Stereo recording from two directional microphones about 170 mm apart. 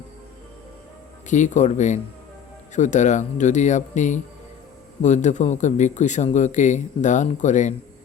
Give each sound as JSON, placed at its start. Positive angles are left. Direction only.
{"t": 1.3, "sound": "speech", "side_deg": 45}